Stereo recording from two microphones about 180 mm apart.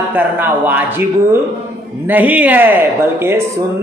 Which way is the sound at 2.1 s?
10° right (ahead or behind).